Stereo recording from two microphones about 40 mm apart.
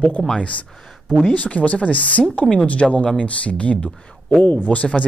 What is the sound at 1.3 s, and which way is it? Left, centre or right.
Speech, left.